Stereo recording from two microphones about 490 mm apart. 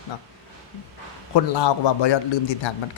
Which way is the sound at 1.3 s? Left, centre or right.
Left.